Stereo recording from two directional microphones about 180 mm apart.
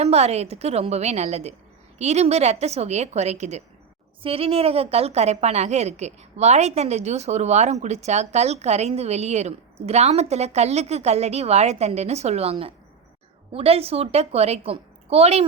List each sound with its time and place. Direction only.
0.0 s a woman's voice: 35° right (ahead or behind)